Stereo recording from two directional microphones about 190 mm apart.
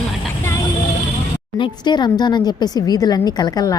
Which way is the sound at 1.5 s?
25° left (ahead or behind).